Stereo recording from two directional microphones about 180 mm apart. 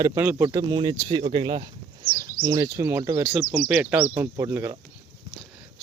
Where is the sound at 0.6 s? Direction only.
25° right (ahead or behind).